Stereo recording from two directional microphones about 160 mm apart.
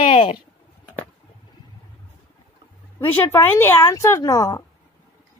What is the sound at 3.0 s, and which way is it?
Speech, 15° left (ahead or behind).